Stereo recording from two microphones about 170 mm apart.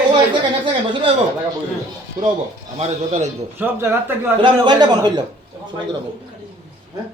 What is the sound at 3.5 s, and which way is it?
Speech, 15° right (ahead or behind).